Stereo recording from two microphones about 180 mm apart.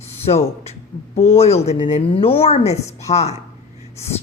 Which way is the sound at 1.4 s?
35° left (ahead or behind).